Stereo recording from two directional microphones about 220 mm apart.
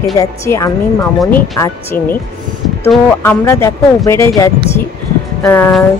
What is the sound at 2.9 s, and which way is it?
Speech, 10° left (ahead or behind).